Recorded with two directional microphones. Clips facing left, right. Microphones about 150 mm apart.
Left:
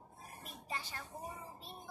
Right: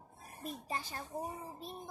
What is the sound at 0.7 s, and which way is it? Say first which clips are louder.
Speech: right 1 dB; 40° right (ahead or behind).